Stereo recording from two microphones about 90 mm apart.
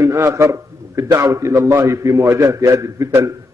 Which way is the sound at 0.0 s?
35° right (ahead or behind).